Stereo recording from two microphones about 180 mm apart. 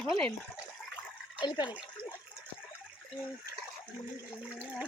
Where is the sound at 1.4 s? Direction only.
25° left (ahead or behind).